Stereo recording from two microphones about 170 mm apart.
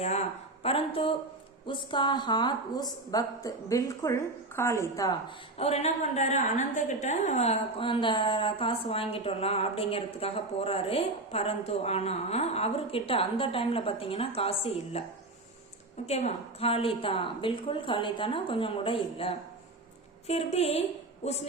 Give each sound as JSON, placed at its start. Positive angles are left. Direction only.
{"t": 0.0, "sound": "a woman's voice", "side_deg": 40}
{"t": 5.5, "sound": "a woman's voice", "side_deg": 35}
{"t": 16.0, "sound": "a woman's voice", "side_deg": 40}